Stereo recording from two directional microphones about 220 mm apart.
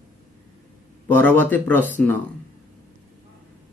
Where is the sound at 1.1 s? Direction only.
10° left (ahead or behind).